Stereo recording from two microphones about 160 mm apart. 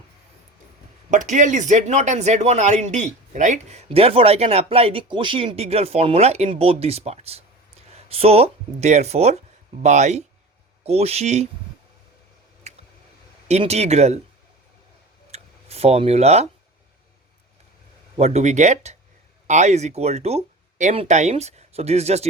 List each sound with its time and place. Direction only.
1.1 s speech: 50° right (ahead or behind)
12.7 s a sound: 45° right (ahead or behind)
13.5 s speech: 40° right (ahead or behind)
15.3 s speech: 40° right (ahead or behind)
18.2 s speech: 40° right (ahead or behind)